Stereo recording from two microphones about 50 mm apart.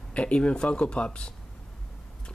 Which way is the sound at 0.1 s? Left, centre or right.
Left.